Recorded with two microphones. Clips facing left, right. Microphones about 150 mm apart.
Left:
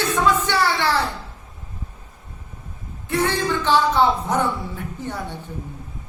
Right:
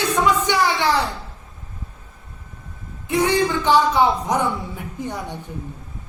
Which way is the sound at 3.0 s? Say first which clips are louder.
Right 3 dB; 15° right (ahead or behind).